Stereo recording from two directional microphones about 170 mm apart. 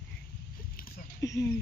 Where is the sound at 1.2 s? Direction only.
20° left (ahead or behind).